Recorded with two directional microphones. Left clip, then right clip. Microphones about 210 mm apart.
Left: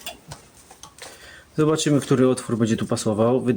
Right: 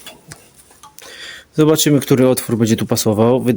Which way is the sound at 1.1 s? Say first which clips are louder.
Right 8 dB; 40° right (ahead or behind).